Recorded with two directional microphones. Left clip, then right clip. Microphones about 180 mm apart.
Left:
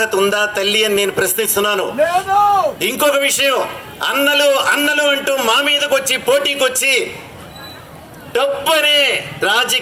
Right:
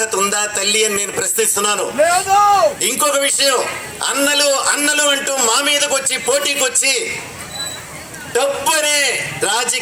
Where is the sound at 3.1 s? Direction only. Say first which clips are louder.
Left 2 dB; 20° left (ahead or behind).